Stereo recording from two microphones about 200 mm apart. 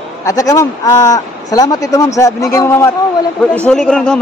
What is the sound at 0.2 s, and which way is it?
A woman's voice, 15° left (ahead or behind).